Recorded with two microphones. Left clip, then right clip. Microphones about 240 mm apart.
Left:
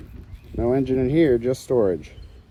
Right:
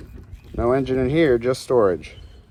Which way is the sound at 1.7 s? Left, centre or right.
Right.